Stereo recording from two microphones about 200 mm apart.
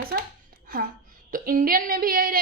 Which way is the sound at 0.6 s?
45° right (ahead or behind).